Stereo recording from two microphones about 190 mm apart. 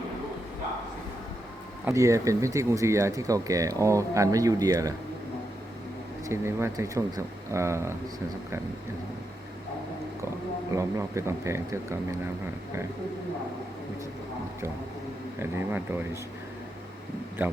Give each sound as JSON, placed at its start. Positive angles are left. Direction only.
{"t": 1.8, "sound": "speech", "side_deg": -15}
{"t": 6.2, "sound": "speech", "side_deg": -15}
{"t": 10.8, "sound": "speech", "side_deg": -15}
{"t": 15.4, "sound": "speech", "side_deg": -10}
{"t": 17.4, "sound": "speech", "side_deg": -10}